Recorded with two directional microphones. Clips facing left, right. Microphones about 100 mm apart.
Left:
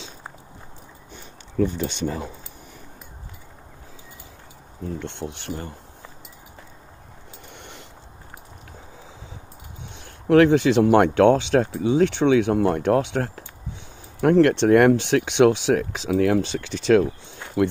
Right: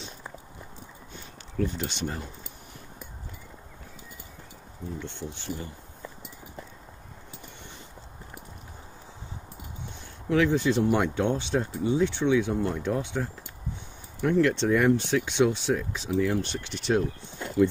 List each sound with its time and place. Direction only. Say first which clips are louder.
4.8 s speech: left 6 dB; 65° left (ahead or behind)
7.5 s a sound: left 4 dB; 70° left (ahead or behind)
9.9 s speech: left 9 dB; 65° left (ahead or behind); by 17.1 s 90° left